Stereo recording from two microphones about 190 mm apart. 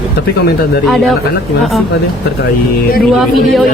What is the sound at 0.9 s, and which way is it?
Speech, centre (ahead or behind).